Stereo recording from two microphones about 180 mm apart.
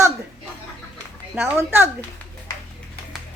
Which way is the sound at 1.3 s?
10° right (ahead or behind).